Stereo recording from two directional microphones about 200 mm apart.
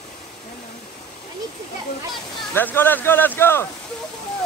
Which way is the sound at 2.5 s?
10° left (ahead or behind).